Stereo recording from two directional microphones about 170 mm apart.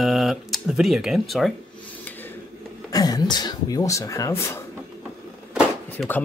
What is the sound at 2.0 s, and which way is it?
Filing, 10° left (ahead or behind).